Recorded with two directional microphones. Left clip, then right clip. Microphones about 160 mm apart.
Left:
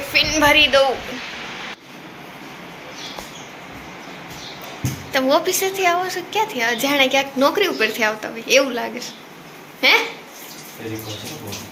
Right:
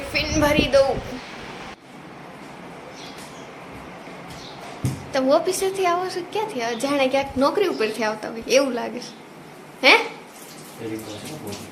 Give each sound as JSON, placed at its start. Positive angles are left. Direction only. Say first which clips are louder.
{"t": 0.1, "sound": "a woman's voice", "louder": "left 6 dB", "side_deg": -5}
{"t": 5.1, "sound": "a woman's voice", "louder": "left 2 dB", "side_deg": -15}